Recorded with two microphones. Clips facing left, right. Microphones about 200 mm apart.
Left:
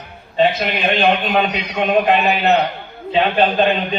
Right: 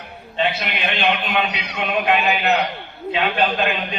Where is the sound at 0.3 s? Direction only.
40° left (ahead or behind).